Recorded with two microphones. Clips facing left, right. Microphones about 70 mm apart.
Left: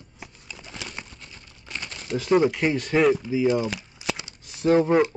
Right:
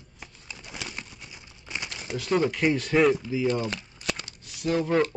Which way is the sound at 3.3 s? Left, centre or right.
Centre.